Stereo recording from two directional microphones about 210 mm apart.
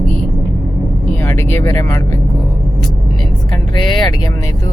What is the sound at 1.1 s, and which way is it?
Vehicle, 10° left (ahead or behind).